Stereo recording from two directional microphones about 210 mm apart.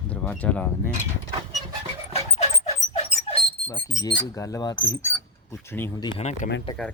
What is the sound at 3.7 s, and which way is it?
Speech, 15° left (ahead or behind).